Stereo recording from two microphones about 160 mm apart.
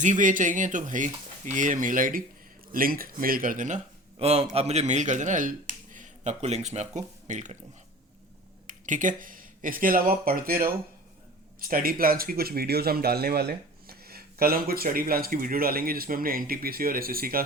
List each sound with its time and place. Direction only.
0.0 s speech: 50° right (ahead or behind)
4.2 s speech: 40° right (ahead or behind)
8.6 s speech: 55° right (ahead or behind)